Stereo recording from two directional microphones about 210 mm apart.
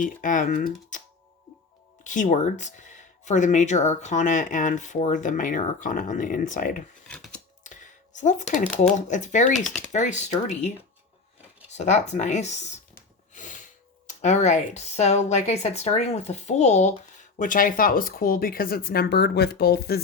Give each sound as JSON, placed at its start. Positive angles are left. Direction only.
{"t": 0.0, "sound": "a woman's voice", "side_deg": 40}
{"t": 2.0, "sound": "a woman's voice", "side_deg": 35}
{"t": 7.1, "sound": "scissors", "side_deg": 5}
{"t": 7.6, "sound": "a sound", "side_deg": 35}
{"t": 9.0, "sound": "a woman's voice", "side_deg": 35}
{"t": 11.7, "sound": "a woman's voice", "side_deg": 35}
{"t": 13.3, "sound": "snort", "side_deg": 35}
{"t": 14.1, "sound": "a woman's voice", "side_deg": 35}